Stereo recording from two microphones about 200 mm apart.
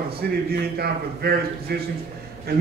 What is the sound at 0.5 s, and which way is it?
A man's voice, 50° right (ahead or behind).